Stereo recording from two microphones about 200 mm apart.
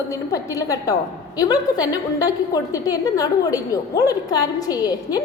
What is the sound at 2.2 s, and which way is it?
A woman's voice, 20° left (ahead or behind).